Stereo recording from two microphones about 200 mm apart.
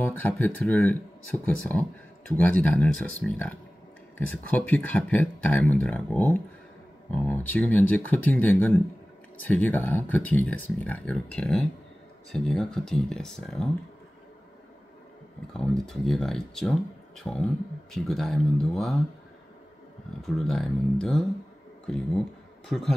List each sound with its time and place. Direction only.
0.0 s speech: 10° left (ahead or behind)
15.5 s speech: 5° left (ahead or behind)
20.2 s speech: centre (ahead or behind)